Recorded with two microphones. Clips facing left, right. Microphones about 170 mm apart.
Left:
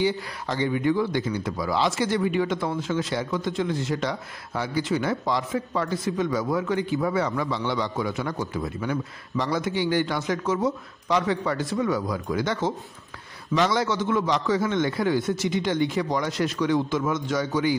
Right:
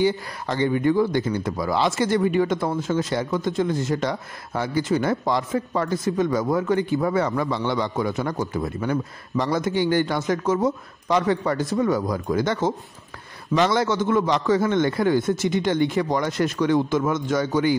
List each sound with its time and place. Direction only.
0.0 s speech: 50° right (ahead or behind)